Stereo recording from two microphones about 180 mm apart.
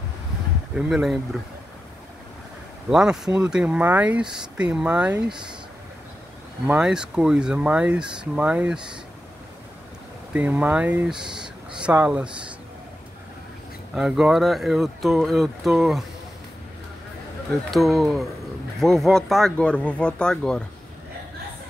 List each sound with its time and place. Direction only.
0.7 s speech: centre (ahead or behind)
2.9 s speech: 5° right (ahead or behind)
6.6 s speech: 5° right (ahead or behind)
10.3 s speech: 10° right (ahead or behind)
13.9 s speech: 5° right (ahead or behind)
17.6 s speech: centre (ahead or behind)